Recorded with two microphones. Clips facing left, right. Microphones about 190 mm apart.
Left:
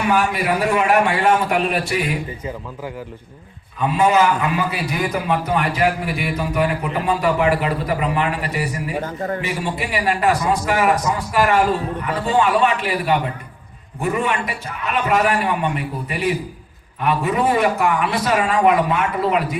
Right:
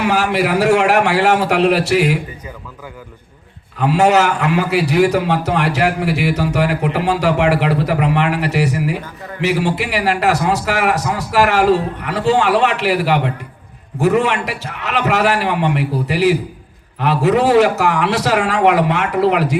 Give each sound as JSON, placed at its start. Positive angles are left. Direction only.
{"t": 0.0, "sound": "a man's voice", "side_deg": -85}
{"t": 3.8, "sound": "a man's voice", "side_deg": -80}
{"t": 9.0, "sound": "a man's voice", "side_deg": 45}
{"t": 9.4, "sound": "a man's voice", "side_deg": -90}